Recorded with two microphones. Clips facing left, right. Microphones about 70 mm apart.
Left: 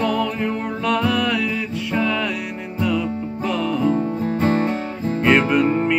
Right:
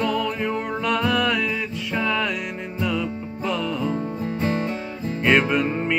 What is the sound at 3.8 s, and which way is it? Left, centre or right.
Music, left.